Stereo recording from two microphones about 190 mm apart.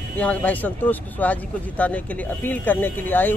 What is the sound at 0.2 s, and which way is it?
Speech, 5° left (ahead or behind).